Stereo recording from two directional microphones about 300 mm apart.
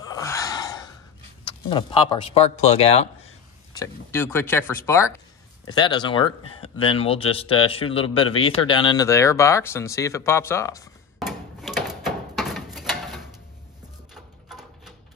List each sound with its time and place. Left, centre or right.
0.0 s gasp: centre
1.4 s speech: centre
3.7 s a man's voice: centre
11.1 s a sound: centre